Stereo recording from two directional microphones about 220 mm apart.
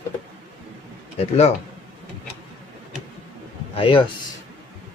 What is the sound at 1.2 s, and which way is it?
Speech, 30° left (ahead or behind).